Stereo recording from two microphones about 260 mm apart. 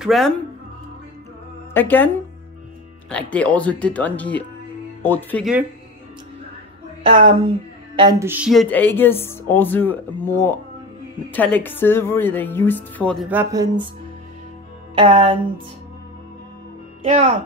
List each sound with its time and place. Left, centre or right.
0.0 s speech: centre
1.7 s speech: centre
3.1 s speech: centre
7.2 s speech: centre
15.0 s speech: right